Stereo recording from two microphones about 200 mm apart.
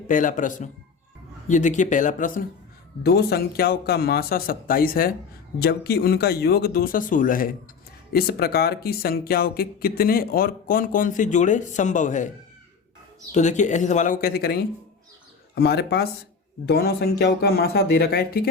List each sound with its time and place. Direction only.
0.1 s speech: 40° left (ahead or behind)
13.3 s speech: 35° left (ahead or behind)